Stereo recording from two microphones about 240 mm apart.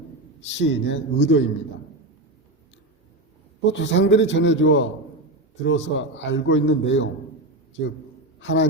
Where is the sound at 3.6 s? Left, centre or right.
Left.